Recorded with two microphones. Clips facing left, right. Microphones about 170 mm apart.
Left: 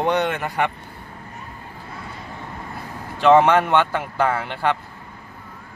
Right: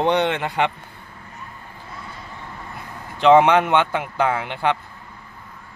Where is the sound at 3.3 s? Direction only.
15° right (ahead or behind).